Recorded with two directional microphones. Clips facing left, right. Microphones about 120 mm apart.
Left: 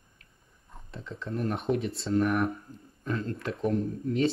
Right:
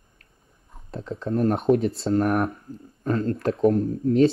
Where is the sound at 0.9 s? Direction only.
40° right (ahead or behind).